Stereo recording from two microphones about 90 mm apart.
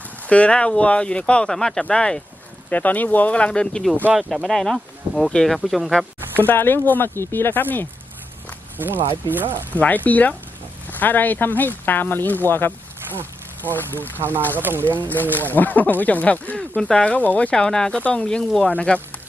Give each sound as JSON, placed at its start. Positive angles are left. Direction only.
{"t": 0.3, "sound": "speech", "side_deg": 15}
{"t": 4.1, "sound": "speech", "side_deg": -5}
{"t": 6.3, "sound": "speech", "side_deg": 20}
{"t": 8.8, "sound": "speech", "side_deg": -20}
{"t": 9.7, "sound": "speech", "side_deg": 20}
{"t": 14.2, "sound": "speech", "side_deg": -25}
{"t": 15.0, "sound": "speech", "side_deg": 20}